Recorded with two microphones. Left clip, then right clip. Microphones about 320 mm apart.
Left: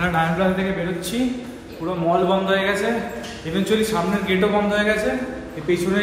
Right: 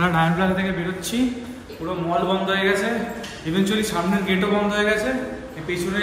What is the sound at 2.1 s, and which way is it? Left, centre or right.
A man's voice, centre.